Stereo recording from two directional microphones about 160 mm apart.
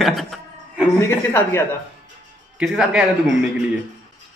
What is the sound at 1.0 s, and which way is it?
Speech, 15° left (ahead or behind).